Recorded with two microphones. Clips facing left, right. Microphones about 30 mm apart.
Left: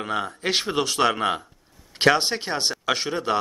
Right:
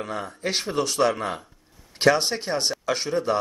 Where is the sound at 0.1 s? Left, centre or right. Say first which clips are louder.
Left 5 dB; left.